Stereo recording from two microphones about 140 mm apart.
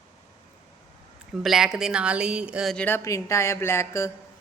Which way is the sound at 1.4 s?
5° right (ahead or behind).